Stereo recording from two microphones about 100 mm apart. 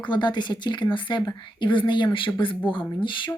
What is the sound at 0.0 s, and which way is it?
Speech, 50° left (ahead or behind).